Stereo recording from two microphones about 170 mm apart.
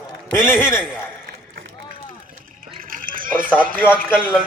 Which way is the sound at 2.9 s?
55° right (ahead or behind).